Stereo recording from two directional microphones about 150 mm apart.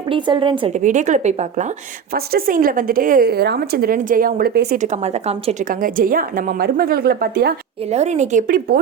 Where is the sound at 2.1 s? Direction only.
80° right.